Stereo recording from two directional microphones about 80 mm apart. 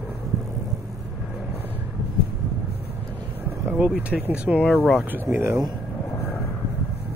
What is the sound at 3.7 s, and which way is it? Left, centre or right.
Vehicle, centre.